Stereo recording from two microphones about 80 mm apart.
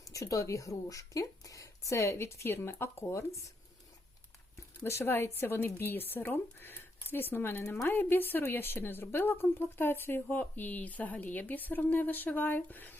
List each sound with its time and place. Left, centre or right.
0.0 s speech: left
4.8 s a woman's voice: left